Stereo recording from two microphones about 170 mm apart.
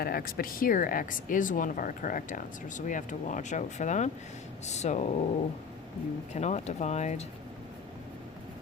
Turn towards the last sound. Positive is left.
turn(degrees=40)  # may be behind; listen again after turning